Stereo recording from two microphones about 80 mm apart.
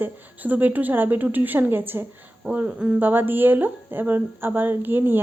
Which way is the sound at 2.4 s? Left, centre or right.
Centre.